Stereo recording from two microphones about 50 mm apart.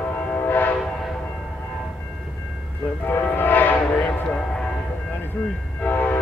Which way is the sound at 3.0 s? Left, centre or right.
Left.